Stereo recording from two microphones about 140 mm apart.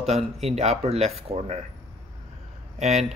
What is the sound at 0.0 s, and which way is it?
Speech, 50° right (ahead or behind).